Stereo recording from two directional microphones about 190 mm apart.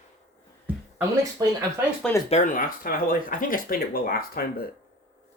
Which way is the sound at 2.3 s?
45° left (ahead or behind).